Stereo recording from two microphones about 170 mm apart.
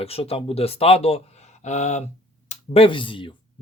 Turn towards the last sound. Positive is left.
turn(degrees=30)  # may be behind; listen again after turning